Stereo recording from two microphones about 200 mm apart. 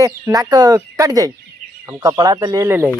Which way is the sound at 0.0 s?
20° right (ahead or behind).